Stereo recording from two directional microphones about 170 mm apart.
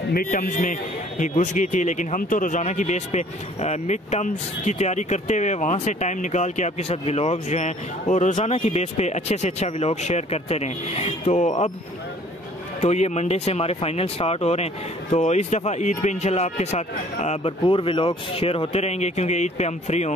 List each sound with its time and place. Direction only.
0.1 s a man's voice: 55° left (ahead or behind)
12.8 s speech: 40° left (ahead or behind)